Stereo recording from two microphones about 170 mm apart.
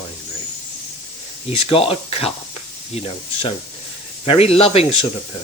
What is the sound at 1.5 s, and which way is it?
Speech, 35° left (ahead or behind).